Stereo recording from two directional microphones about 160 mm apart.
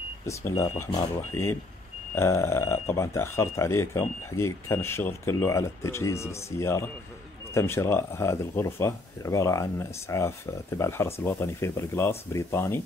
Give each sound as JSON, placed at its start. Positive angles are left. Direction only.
{"t": 0.3, "sound": "speech", "side_deg": 20}